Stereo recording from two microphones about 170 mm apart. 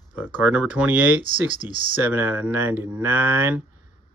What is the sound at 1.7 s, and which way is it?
Speech, 30° right (ahead or behind).